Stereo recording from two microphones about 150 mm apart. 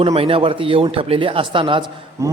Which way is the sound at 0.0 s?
40° right (ahead or behind).